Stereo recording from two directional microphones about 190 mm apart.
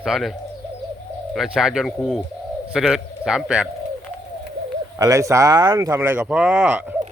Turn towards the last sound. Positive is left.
turn(degrees=-5)  # may be behind; listen again after turning